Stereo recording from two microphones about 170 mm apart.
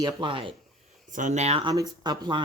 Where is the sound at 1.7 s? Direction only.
25° right (ahead or behind).